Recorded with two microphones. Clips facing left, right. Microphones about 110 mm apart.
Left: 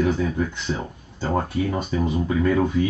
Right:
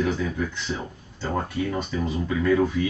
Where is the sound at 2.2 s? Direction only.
35° left (ahead or behind).